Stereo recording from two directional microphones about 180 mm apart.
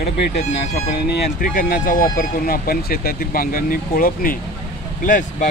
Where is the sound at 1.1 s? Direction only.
50° left (ahead or behind).